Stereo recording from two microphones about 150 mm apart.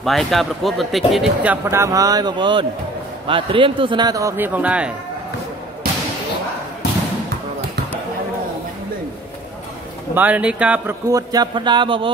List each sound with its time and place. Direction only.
0.0 s a man's voice: centre (ahead or behind); by 4.5 s 20° right (ahead or behind)
4.6 s speech: 10° right (ahead or behind)
10.1 s speech: 10° right (ahead or behind)
11.1 s a man's voice: 25° right (ahead or behind)